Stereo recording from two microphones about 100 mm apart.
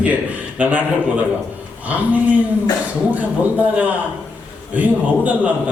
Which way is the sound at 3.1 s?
15° right (ahead or behind).